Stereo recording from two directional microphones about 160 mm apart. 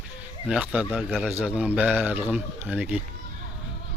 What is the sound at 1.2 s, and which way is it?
Speech, 10° right (ahead or behind).